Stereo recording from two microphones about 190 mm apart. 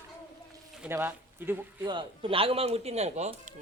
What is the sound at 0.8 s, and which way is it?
Speech, 10° right (ahead or behind).